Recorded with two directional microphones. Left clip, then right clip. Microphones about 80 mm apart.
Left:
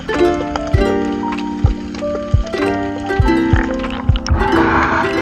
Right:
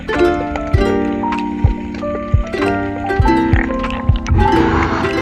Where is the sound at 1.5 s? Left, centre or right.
Left.